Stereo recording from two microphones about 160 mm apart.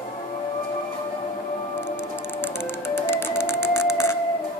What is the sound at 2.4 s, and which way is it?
Music, 15° left (ahead or behind).